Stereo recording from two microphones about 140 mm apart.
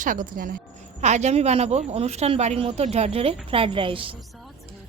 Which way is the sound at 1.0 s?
55° right (ahead or behind).